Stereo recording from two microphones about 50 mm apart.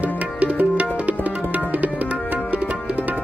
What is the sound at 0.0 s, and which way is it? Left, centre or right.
Tabla, right.